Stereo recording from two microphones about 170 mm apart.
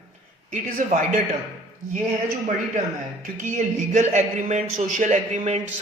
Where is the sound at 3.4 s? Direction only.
45° right (ahead or behind).